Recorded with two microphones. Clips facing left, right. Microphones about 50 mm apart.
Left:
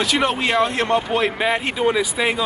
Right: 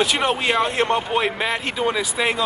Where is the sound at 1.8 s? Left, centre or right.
Centre.